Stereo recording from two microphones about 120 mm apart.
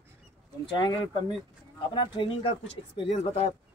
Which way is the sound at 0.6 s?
35° left (ahead or behind).